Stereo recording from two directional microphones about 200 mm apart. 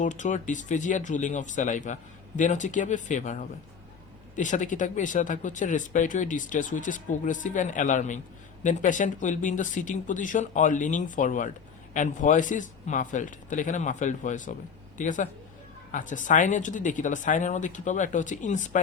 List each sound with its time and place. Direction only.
0.0 s speech: 40° left (ahead or behind)